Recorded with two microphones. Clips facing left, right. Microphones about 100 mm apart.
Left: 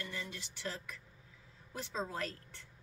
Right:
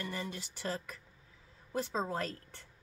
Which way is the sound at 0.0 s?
45° right (ahead or behind).